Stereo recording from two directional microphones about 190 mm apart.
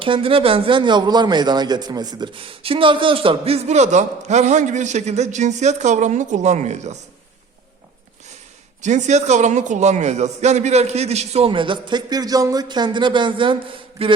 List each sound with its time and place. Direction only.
0.0 s speech: 30° right (ahead or behind)
8.8 s speech: 40° right (ahead or behind)